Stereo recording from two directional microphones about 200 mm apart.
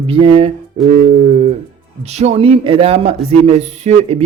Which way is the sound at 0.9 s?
35° right (ahead or behind).